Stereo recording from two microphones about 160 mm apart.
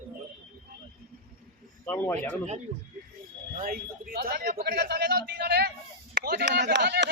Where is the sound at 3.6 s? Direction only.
65° right (ahead or behind).